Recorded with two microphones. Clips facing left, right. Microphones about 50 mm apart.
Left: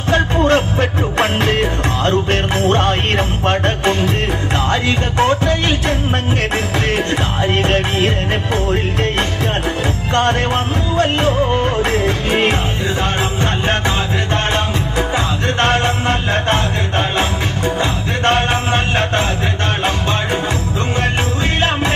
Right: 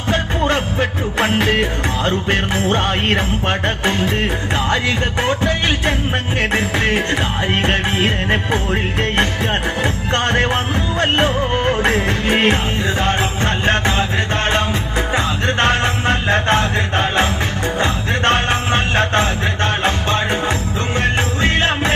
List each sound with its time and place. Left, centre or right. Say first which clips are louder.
0.5 s music: left 4 dB; centre
3.2 s music: left 2 dB; centre
9.8 s music: left 2 dB; right
10.4 s music: even; right
18.7 s mantra: even; right
20.9 s music: right 1 dB; right